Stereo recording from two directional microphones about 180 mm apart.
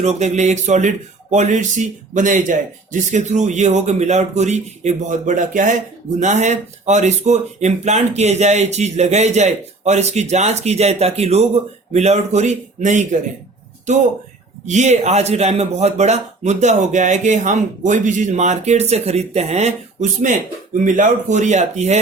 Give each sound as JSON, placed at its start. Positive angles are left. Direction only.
{"t": 0.0, "sound": "speech", "side_deg": -40}